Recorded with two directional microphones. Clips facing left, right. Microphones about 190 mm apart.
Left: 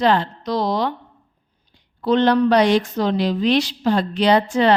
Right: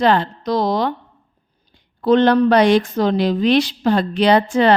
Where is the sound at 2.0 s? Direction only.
50° right (ahead or behind).